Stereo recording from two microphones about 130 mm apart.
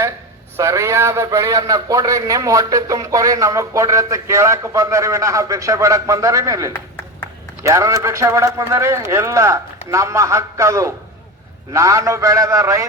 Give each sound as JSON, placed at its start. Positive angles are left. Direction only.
{"t": 0.5, "sound": "a man's voice", "side_deg": -20}